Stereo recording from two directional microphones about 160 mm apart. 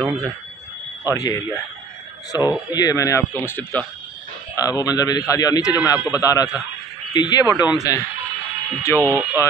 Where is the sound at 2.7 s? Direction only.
25° left (ahead or behind).